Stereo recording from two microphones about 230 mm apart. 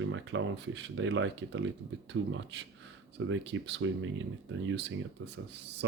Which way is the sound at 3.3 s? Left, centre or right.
Right.